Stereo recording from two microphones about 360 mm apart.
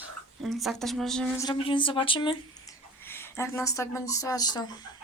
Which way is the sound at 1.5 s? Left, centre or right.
Centre.